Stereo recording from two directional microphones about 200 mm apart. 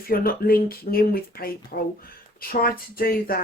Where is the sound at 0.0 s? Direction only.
45° left (ahead or behind).